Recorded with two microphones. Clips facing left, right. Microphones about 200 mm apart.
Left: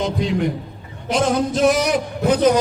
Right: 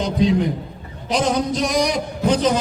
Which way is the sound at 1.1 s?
Centre (ahead or behind).